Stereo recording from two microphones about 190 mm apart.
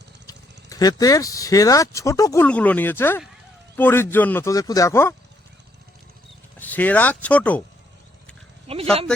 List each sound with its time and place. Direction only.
0.3 s speech: 20° left (ahead or behind)
6.6 s speech: 10° left (ahead or behind)
8.6 s dog: 30° right (ahead or behind)